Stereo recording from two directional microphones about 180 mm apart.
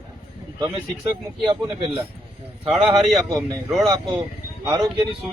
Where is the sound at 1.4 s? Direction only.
25° right (ahead or behind).